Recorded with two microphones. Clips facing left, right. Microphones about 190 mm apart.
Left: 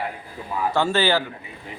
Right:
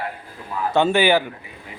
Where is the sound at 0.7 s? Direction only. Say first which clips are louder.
Right 5 dB; 15° right (ahead or behind).